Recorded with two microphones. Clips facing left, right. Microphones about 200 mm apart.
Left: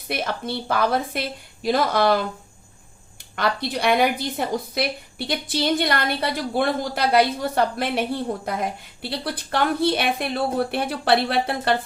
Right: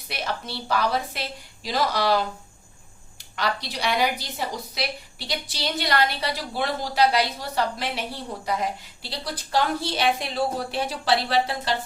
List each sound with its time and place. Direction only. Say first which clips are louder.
0.1 s a woman's voice: left 5 dB; 55° left (ahead or behind)
3.3 s a woman's voice: left 4 dB; 55° left (ahead or behind)